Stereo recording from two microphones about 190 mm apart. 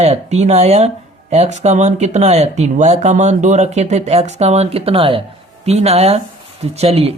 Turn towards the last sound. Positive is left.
turn(degrees=-30)  # may be behind; listen again after turning